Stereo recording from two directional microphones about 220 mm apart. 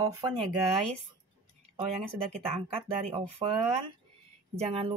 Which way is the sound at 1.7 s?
25° right (ahead or behind).